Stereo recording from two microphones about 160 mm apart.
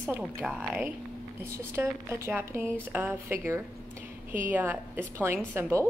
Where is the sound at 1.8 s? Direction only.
15° right (ahead or behind).